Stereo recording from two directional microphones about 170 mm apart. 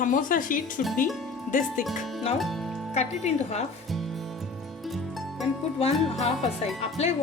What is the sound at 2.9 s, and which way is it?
Speech, 40° left (ahead or behind).